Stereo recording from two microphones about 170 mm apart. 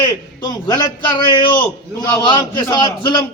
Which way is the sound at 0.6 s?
25° left (ahead or behind).